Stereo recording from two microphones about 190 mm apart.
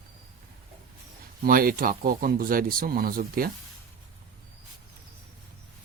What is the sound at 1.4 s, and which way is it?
Speech, 50° right (ahead or behind).